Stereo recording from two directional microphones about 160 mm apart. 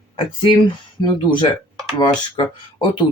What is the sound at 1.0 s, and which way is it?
Speech, 30° left (ahead or behind).